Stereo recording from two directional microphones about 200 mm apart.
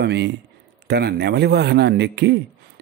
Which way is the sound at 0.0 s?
60° right (ahead or behind).